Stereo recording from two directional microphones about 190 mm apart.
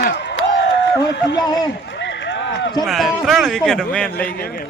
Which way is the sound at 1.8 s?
70° left (ahead or behind).